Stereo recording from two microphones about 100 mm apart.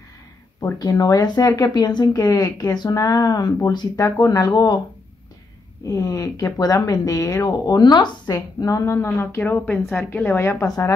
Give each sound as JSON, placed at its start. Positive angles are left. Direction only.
{"t": 0.7, "sound": "speech", "side_deg": 40}
{"t": 5.9, "sound": "a woman's voice", "side_deg": 35}